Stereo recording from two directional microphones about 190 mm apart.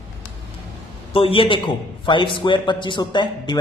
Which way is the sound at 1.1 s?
30° left (ahead or behind).